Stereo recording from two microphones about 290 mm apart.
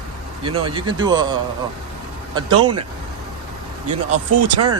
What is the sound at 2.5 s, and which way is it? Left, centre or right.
Speech, right.